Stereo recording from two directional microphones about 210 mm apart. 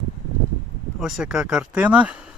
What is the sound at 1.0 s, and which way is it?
Speech, centre (ahead or behind).